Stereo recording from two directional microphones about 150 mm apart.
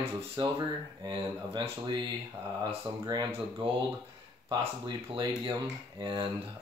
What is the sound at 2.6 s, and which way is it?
Speech, 30° right (ahead or behind).